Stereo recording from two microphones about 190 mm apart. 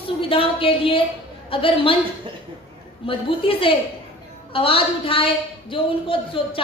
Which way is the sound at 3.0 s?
30° left (ahead or behind).